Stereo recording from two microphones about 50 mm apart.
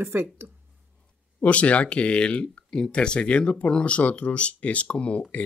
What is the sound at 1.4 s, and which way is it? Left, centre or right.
Speech, left.